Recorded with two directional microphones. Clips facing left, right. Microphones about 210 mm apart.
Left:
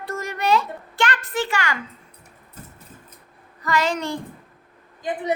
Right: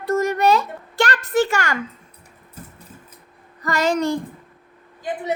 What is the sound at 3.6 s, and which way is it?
Speech, 45° right (ahead or behind).